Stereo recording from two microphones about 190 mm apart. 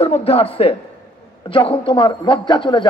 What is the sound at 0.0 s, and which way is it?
A man's voice, 30° left (ahead or behind).